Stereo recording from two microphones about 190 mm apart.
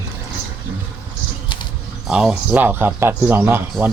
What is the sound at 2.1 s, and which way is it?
Speech, 5° right (ahead or behind).